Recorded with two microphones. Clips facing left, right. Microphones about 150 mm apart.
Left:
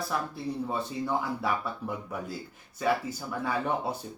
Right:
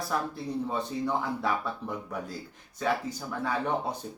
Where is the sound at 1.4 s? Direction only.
5° left (ahead or behind).